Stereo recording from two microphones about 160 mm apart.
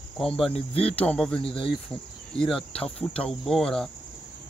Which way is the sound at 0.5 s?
40° left (ahead or behind).